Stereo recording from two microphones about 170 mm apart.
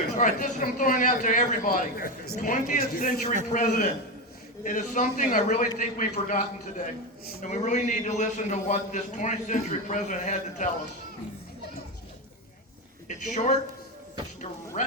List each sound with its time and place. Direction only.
0.2 s a man's voice: 50° left (ahead or behind)
2.4 s a man's voice: 50° left (ahead or behind)
13.1 s a man's voice: 45° left (ahead or behind)